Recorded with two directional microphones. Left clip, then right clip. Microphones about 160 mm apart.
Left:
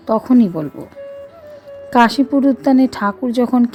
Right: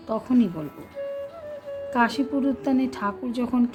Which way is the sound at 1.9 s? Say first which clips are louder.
Left 11 dB; 50° left (ahead or behind).